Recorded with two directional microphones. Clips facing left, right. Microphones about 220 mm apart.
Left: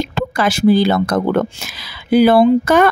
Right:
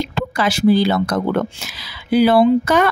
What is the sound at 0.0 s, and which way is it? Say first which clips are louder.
Speech: left 2 dB; 50° left (ahead or behind).